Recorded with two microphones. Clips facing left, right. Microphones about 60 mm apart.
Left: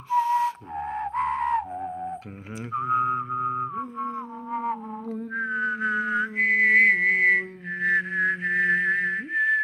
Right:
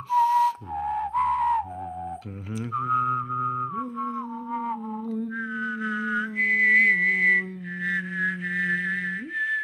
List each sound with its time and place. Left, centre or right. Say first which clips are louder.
0.1 s music: right 2 dB; centre
0.5 s whistle: right 3 dB; left
2.9 s music: left 1 dB; left
5.1 s whistling: left 4 dB; left